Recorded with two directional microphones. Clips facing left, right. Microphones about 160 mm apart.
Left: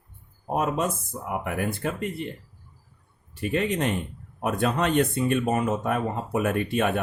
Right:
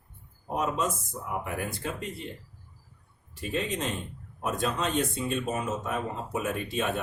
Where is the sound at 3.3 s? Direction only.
60° left (ahead or behind).